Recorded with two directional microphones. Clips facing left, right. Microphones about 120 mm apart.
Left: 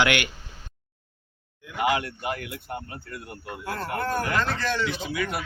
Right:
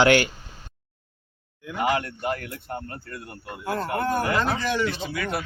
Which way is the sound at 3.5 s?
5° right (ahead or behind).